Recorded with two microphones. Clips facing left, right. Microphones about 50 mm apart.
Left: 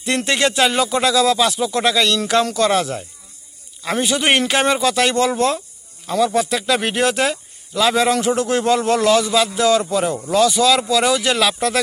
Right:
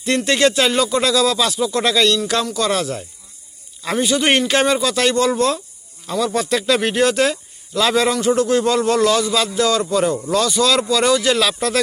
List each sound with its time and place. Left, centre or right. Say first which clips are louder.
0.3 s speech: right 1 dB; centre
1.9 s speech: right 2 dB; centre
2.1 s speech: left 3 dB; left
3.9 s speech: right 1 dB; left
6.1 s speech: left 2 dB; centre
6.8 s speech: right 2 dB; left
7.7 s speech: even; centre
8.3 s speech: right 1 dB; left